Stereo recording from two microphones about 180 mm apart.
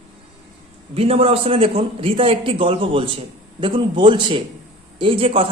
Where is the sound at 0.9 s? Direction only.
30° right (ahead or behind).